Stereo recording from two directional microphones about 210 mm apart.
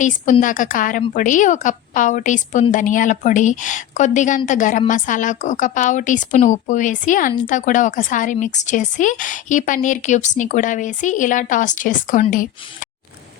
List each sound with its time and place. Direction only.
0.0 s a woman's voice: 35° left (ahead or behind)